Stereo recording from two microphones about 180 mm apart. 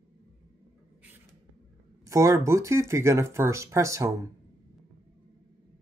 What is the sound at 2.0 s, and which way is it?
Speech, 15° right (ahead or behind).